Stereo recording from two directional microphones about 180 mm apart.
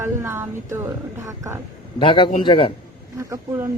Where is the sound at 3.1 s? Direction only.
15° right (ahead or behind).